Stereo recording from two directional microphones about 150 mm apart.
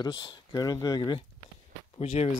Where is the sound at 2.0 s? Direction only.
45° left (ahead or behind).